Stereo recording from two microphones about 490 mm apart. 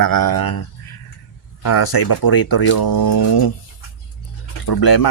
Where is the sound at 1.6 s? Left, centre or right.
Left.